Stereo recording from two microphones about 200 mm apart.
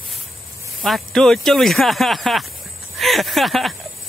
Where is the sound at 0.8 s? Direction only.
Centre (ahead or behind).